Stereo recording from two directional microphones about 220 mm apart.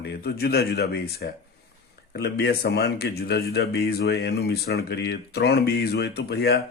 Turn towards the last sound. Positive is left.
turn(degrees=50)  # may be behind; listen again after turning